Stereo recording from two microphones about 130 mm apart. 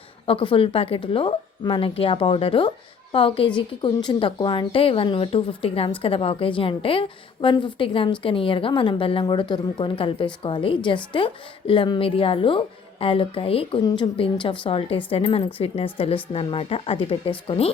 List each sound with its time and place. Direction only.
0.3 s a woman's voice: 45° left (ahead or behind)